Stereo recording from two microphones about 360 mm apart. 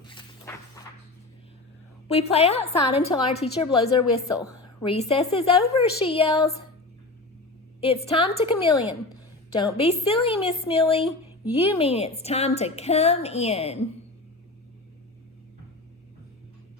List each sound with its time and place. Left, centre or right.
0.0 s a sound: centre
2.0 s a woman's voice: centre
7.8 s a woman's voice: centre